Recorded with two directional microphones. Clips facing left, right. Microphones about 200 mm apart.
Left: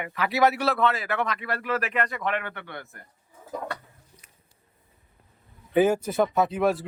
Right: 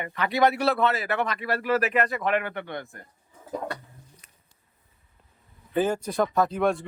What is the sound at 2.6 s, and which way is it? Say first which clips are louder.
Speech: right 5 dB; 20° right (ahead or behind).